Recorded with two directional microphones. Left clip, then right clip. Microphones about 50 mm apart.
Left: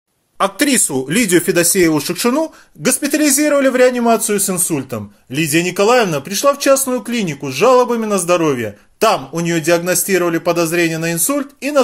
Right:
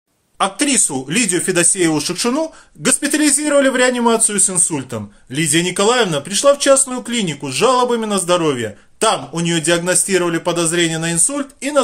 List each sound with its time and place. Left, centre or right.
0.4 s a man's voice: left
1.3 s speech: left
2.8 s a man's voice: centre
4.4 s a man's voice: left
7.2 s a man's voice: centre
7.6 s a man's voice: left